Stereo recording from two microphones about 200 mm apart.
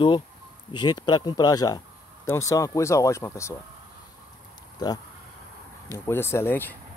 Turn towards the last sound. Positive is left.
turn(degrees=10)  # may be behind; listen again after turning